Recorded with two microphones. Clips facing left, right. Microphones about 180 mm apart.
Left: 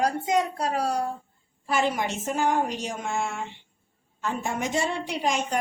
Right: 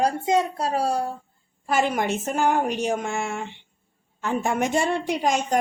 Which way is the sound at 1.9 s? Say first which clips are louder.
Right 3 dB; 60° right (ahead or behind).